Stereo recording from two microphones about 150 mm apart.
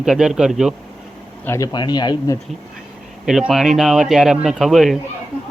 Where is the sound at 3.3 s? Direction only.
Centre (ahead or behind).